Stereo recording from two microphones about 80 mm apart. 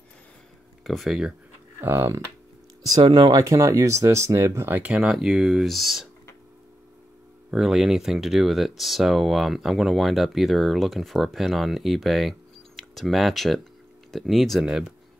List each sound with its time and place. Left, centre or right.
0.8 s speech: centre
1.8 s speech: right
3.0 s speech: right
4.9 s speech: centre
7.5 s speech: centre